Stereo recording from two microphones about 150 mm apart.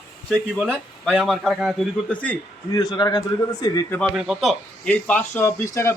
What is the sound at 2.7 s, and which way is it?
A man's voice, 25° left (ahead or behind).